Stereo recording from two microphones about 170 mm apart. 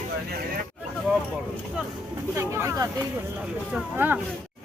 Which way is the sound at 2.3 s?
15° right (ahead or behind).